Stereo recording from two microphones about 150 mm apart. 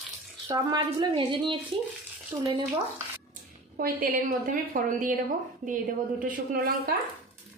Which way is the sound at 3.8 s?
70° right (ahead or behind).